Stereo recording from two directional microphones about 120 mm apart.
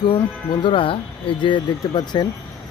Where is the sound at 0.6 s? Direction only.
45° left (ahead or behind).